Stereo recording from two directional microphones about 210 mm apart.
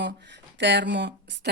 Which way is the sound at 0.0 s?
55° right (ahead or behind).